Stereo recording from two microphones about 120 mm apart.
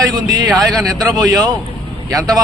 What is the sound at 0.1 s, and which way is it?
Speech, 35° right (ahead or behind).